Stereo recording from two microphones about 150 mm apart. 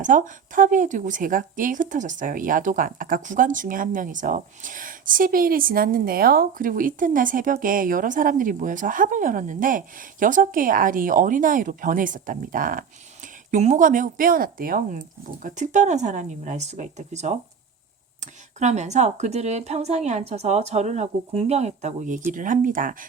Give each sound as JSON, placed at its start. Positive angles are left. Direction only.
{"t": 0.0, "sound": "speech", "side_deg": -60}
{"t": 13.2, "sound": "speech", "side_deg": -55}